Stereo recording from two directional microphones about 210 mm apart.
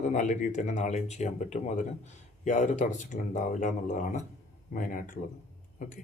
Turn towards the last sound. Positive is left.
turn(degrees=40)  # may be behind; listen again after turning